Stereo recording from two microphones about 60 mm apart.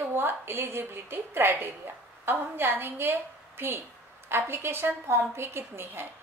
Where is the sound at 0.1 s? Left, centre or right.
Right.